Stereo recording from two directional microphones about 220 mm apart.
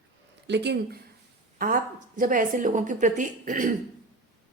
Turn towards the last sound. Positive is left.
turn(degrees=-35)  # may be behind; listen again after turning